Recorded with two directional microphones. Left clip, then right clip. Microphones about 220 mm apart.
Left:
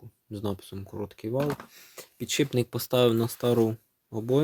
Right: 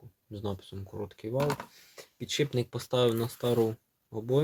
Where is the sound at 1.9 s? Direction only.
40° left (ahead or behind).